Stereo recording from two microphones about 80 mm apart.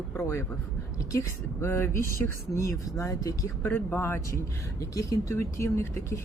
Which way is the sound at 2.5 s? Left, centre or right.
Left.